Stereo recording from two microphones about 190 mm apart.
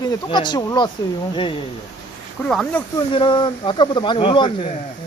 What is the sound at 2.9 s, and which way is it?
Speech, 25° left (ahead or behind).